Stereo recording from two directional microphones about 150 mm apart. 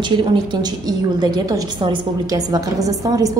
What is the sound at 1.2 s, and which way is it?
A woman's voice, 25° right (ahead or behind).